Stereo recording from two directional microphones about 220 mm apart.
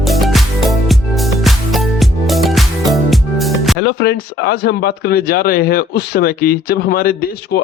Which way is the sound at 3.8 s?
45° left (ahead or behind).